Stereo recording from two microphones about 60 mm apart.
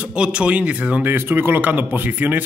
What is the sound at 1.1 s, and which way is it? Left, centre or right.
Speech, right.